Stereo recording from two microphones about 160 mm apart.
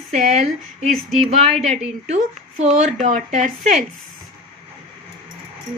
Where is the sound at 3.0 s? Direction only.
50° right (ahead or behind).